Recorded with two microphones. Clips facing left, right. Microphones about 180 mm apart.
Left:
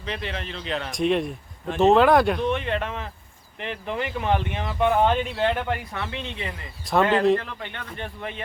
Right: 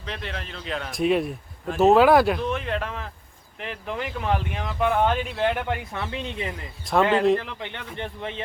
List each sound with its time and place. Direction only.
0.0 s a man's voice: centre (ahead or behind)
6.8 s a man's voice: centre (ahead or behind)
7.6 s speech: 15° right (ahead or behind)